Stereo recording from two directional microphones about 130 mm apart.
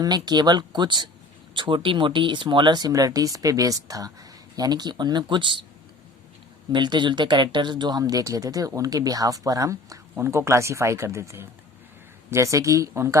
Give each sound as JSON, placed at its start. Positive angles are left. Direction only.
{"t": 0.0, "sound": "speech", "side_deg": -30}
{"t": 6.7, "sound": "speech", "side_deg": -35}